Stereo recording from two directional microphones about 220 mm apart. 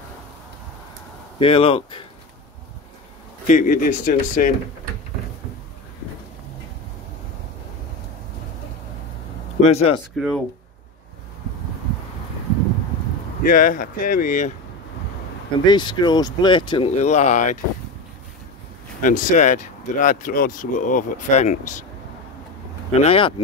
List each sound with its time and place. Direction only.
1.4 s speech: 25° left (ahead or behind)
3.4 s speech: 35° left (ahead or behind)
9.6 s speech: 30° left (ahead or behind)
10.1 s speech: centre (ahead or behind)
13.4 s speech: 40° left (ahead or behind)
15.6 s speech: 20° left (ahead or behind)
18.9 s speech: 35° left (ahead or behind)
22.9 s speech: 25° left (ahead or behind)